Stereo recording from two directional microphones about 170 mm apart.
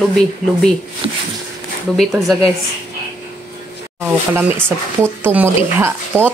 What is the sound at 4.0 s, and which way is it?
Speech, 15° right (ahead or behind).